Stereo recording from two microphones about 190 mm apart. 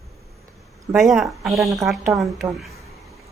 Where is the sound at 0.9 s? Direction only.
Centre (ahead or behind).